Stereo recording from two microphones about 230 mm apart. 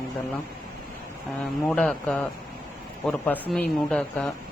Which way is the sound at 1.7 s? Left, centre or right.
Centre.